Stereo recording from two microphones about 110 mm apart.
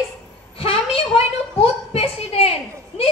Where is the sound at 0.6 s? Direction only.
65° left (ahead or behind).